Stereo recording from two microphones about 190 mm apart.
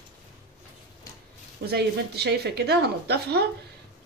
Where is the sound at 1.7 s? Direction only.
60° right (ahead or behind).